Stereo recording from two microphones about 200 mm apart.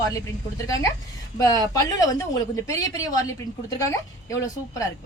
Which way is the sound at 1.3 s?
15° left (ahead or behind).